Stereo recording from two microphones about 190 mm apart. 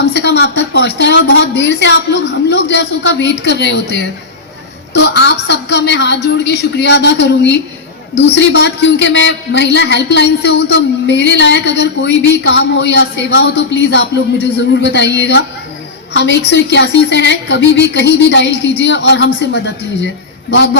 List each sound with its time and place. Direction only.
0.0 s a man's voice: 60° left (ahead or behind)